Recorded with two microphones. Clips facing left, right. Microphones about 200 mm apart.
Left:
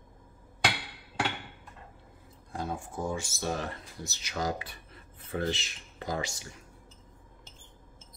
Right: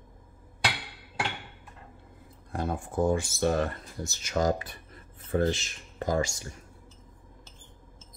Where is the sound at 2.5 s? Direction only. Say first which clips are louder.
Right 4 dB; 60° right (ahead or behind).